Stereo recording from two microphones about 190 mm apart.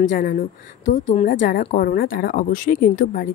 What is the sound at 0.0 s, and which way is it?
A woman's voice, 45° left (ahead or behind).